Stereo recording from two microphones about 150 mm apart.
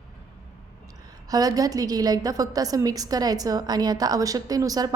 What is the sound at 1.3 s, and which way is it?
A woman's voice, 25° right (ahead or behind).